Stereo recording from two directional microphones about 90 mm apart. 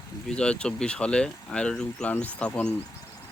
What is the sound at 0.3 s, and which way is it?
Speech, 10° left (ahead or behind).